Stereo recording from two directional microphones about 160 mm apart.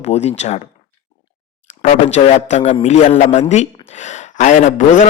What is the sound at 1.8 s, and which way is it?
A man's voice, 45° left (ahead or behind).